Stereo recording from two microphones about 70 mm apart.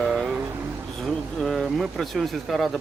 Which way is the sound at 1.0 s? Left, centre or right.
Centre.